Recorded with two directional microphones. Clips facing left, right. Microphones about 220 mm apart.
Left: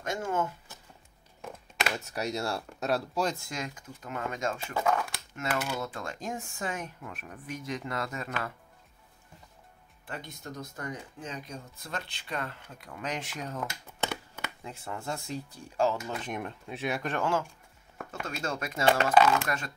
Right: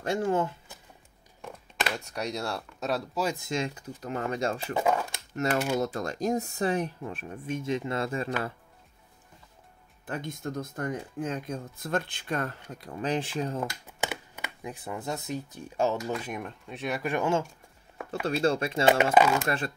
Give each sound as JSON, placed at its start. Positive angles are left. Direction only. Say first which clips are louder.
{"t": 0.0, "sound": "speech", "louder": "right 5 dB", "side_deg": -35}
{"t": 2.0, "sound": "speech", "louder": "even", "side_deg": 5}
{"t": 3.3, "sound": "speech", "louder": "right 7 dB", "side_deg": -25}
{"t": 4.7, "sound": "speech", "louder": "right 1 dB", "side_deg": -20}
{"t": 5.3, "sound": "speech", "louder": "right 6 dB", "side_deg": -40}
{"t": 10.0, "sound": "speech", "louder": "right 7 dB", "side_deg": -50}
{"t": 12.8, "sound": "speech", "louder": "right 7 dB", "side_deg": -30}
{"t": 14.0, "sound": "speech", "louder": "even", "side_deg": -15}
{"t": 16.2, "sound": "speech", "louder": "even", "side_deg": -5}
{"t": 17.1, "sound": "speech", "louder": "right 4 dB", "side_deg": -20}
{"t": 18.2, "sound": "speech", "louder": "right 9 dB", "side_deg": -30}